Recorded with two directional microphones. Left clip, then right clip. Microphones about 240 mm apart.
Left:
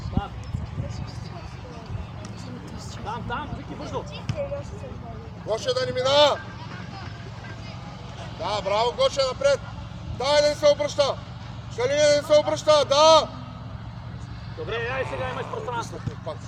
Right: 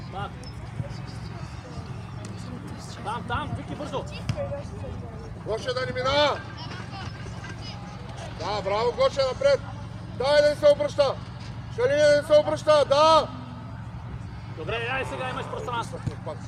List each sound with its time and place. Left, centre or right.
3.1 s a sound: right
3.9 s speech: right
5.5 s speech: left
8.4 s a man's voice: left
14.7 s speech: right